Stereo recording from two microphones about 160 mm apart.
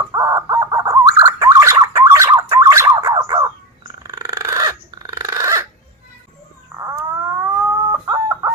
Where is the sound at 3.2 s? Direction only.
25° right (ahead or behind).